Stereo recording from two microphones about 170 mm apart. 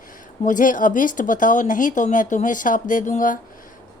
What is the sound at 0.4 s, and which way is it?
A woman's voice, 50° left (ahead or behind).